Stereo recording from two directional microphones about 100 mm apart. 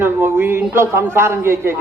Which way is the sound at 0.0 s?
25° right (ahead or behind).